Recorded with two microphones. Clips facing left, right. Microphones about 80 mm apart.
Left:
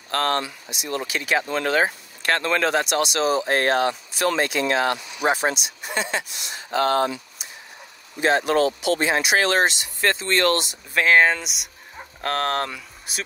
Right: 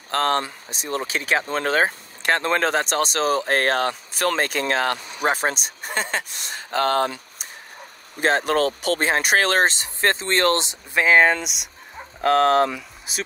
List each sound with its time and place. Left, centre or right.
0.1 s speech: right
2.2 s speech: right
2.5 s speech: right
11.0 s speech: centre